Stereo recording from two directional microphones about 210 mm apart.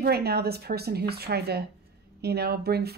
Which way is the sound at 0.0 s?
50° right (ahead or behind).